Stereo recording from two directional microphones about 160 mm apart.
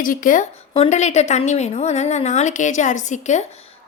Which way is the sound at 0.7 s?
40° left (ahead or behind).